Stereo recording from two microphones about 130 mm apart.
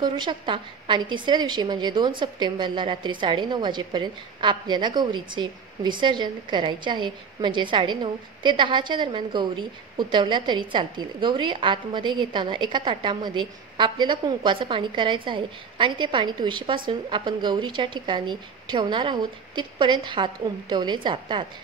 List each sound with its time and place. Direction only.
0.0 s a woman's voice: 35° right (ahead or behind)